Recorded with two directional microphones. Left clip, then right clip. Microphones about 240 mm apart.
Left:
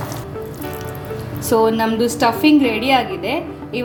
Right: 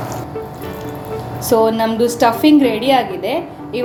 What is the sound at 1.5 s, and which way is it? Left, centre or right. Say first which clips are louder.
A woman's voice: right 2 dB; centre.